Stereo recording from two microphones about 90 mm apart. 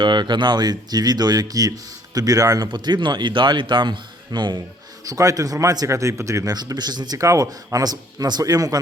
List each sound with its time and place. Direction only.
0.0 s speech: 60° right (ahead or behind); by 2.6 s 40° right (ahead or behind)
2.6 s speech: 55° right (ahead or behind)
5.0 s speech: 40° right (ahead or behind)
7.2 s speech: 40° right (ahead or behind)